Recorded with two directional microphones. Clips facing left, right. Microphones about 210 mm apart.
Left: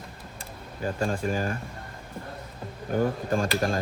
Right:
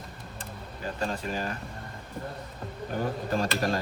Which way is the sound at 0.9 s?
50° left (ahead or behind).